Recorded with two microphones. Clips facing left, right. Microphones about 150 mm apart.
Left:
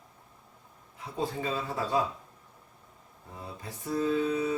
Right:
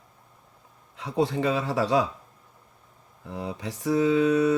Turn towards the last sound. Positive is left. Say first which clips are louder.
# right 7 dB
turn(degrees=-85)